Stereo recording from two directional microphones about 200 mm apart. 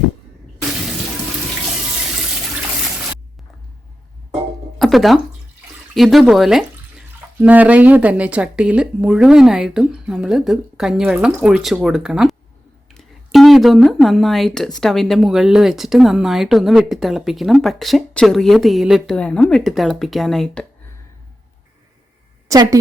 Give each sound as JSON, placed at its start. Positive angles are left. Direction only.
{"t": 4.8, "sound": "speech", "side_deg": 0}
{"t": 22.4, "sound": "a woman's voice", "side_deg": -15}